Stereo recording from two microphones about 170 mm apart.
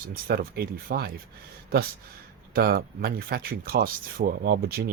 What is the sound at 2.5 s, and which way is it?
Speech, 65° right (ahead or behind).